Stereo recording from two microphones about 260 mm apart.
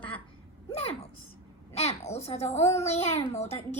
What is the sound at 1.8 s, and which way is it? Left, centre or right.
A woman's voice, left.